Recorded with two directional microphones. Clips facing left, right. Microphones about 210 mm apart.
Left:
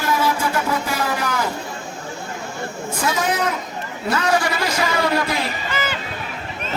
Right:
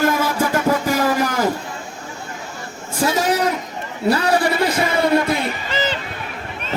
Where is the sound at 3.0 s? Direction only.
35° right (ahead or behind).